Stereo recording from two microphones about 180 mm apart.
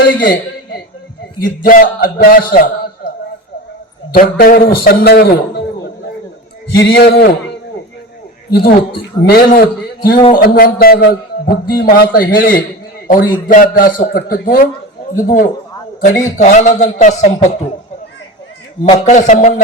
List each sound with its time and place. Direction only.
0.1 s a sound: 50° left (ahead or behind)
1.4 s a man's voice: 50° left (ahead or behind)
4.1 s a man's voice: 55° left (ahead or behind)
6.7 s a man's voice: 65° left (ahead or behind)
9.0 s a man's voice: 60° left (ahead or behind); by 17.5 s 40° left (ahead or behind)
18.9 s a man's voice: 40° left (ahead or behind)